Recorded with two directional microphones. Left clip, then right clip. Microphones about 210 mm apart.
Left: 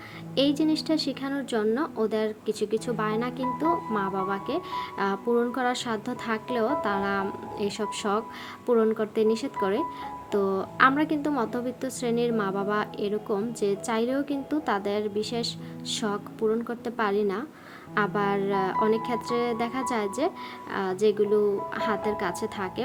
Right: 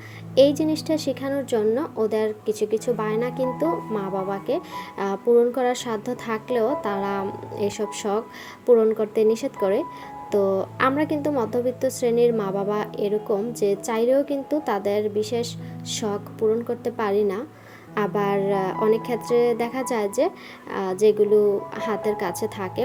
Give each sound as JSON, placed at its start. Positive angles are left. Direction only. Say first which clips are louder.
{"t": 0.3, "sound": "a woman's voice", "louder": "right 7 dB", "side_deg": 0}